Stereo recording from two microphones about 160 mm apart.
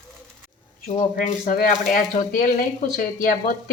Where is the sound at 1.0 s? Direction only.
55° left (ahead or behind).